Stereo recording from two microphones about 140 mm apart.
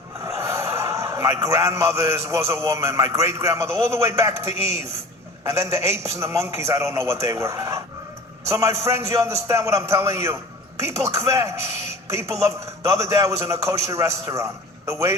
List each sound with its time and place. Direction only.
0.3 s a man's voice: 20° right (ahead or behind)